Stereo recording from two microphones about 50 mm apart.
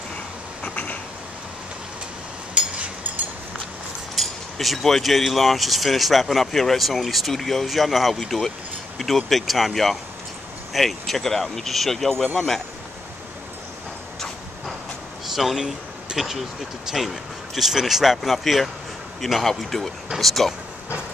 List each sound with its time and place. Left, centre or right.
0.6 s cat: left
4.1 s speech: centre
15.2 s speech: centre